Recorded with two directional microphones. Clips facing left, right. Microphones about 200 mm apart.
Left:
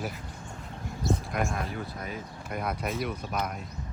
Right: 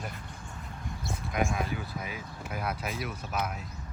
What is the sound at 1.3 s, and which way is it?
Speech, centre (ahead or behind).